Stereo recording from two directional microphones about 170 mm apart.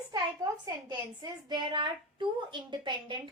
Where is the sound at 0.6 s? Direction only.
25° right (ahead or behind).